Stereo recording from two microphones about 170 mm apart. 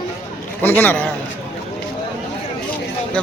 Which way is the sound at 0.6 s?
10° left (ahead or behind).